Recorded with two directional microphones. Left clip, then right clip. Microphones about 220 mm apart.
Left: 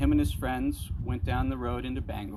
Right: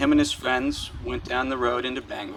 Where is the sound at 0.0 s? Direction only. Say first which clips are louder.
Right 7 dB; 50° left (ahead or behind).